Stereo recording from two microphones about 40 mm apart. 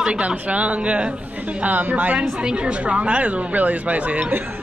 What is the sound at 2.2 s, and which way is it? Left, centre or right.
A woman's voice, right.